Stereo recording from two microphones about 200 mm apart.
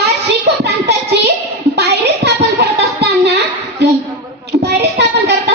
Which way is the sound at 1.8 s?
55° right (ahead or behind).